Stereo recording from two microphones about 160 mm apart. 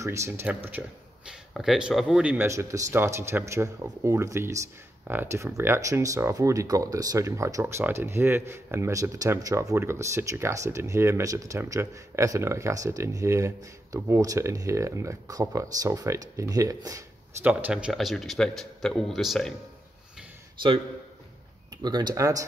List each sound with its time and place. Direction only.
0.0 s speech: 20° right (ahead or behind); by 19.5 s centre (ahead or behind)
20.6 s a man's voice: 30° right (ahead or behind)
21.8 s speech: 25° right (ahead or behind)